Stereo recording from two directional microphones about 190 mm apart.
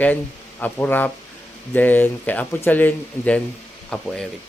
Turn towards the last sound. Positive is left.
turn(degrees=5)  # may be behind; listen again after turning